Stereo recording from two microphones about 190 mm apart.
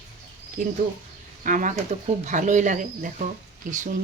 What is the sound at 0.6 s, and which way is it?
A woman's voice, 45° right (ahead or behind).